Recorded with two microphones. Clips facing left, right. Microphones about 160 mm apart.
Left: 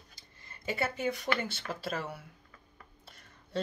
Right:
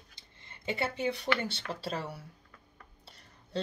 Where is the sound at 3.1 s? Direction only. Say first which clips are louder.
Right 1 dB; 30° right (ahead or behind).